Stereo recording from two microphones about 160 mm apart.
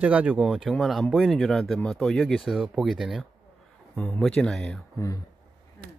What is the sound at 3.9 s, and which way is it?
Speech, 15° left (ahead or behind).